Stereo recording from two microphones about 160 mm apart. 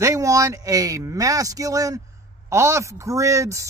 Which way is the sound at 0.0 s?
20° right (ahead or behind).